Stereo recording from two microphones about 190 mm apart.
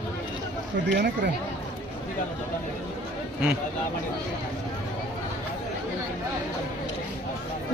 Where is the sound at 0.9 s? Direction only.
60° right (ahead or behind).